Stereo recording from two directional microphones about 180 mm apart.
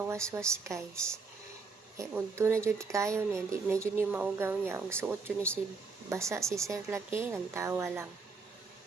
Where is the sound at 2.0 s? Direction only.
15° right (ahead or behind).